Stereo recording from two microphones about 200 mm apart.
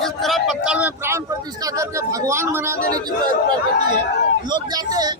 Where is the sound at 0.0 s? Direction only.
Centre (ahead or behind).